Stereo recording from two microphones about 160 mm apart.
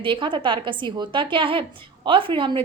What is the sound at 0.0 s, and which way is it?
A woman's voice, 30° right (ahead or behind).